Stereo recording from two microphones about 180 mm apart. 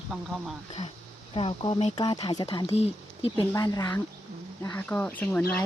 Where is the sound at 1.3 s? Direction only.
30° left (ahead or behind).